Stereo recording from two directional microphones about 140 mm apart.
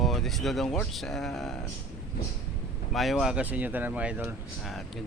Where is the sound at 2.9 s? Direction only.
Centre (ahead or behind).